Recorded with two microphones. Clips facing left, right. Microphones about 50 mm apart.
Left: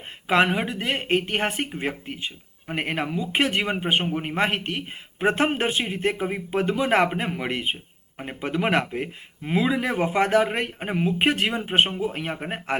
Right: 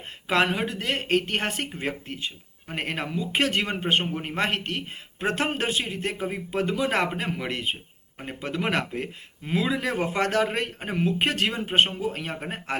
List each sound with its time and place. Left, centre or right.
0.3 s speech: centre